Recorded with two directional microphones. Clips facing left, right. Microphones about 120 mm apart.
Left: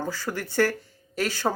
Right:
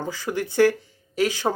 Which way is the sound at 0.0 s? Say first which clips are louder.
Right 3 dB; 15° right (ahead or behind).